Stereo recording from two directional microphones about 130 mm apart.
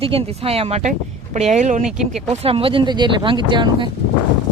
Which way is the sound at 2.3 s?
50° right (ahead or behind).